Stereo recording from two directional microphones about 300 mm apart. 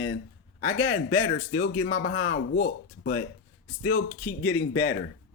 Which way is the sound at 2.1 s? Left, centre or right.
Left.